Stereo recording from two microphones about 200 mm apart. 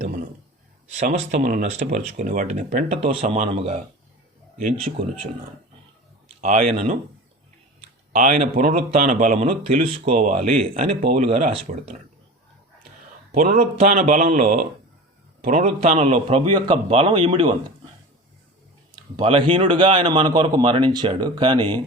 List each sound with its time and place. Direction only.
0.9 s speech: 35° right (ahead or behind)
4.9 s speech: 35° right (ahead or behind)
6.2 s speech: 30° right (ahead or behind)
8.1 s speech: 45° right (ahead or behind)
9.8 s speech: 25° right (ahead or behind)
13.3 s a man's voice: 45° right (ahead or behind); by 17.5 s 25° right (ahead or behind)
19.1 s a man's voice: 25° right (ahead or behind)